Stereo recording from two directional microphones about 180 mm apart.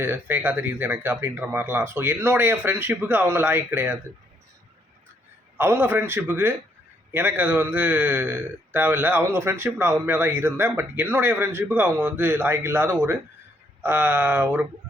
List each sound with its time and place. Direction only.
0.0 s speech: 10° right (ahead or behind)
5.5 s speech: 15° right (ahead or behind)